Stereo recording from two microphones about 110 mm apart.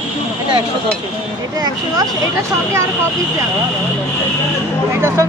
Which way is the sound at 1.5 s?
35° right (ahead or behind).